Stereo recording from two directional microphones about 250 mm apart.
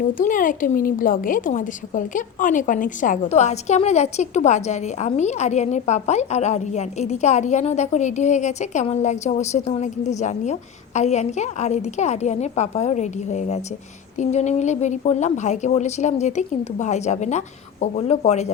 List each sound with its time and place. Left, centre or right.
0.1 s a woman's voice: left